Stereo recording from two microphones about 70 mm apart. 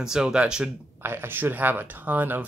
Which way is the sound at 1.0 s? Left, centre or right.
Right.